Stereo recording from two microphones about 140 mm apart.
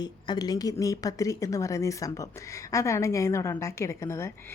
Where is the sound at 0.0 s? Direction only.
30° left (ahead or behind).